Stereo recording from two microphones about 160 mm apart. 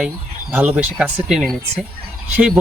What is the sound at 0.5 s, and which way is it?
Speech, 10° right (ahead or behind).